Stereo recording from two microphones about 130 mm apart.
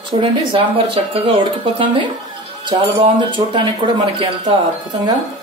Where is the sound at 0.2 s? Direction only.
40° right (ahead or behind).